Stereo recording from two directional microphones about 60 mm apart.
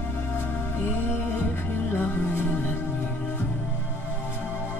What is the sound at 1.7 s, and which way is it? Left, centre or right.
Music, left.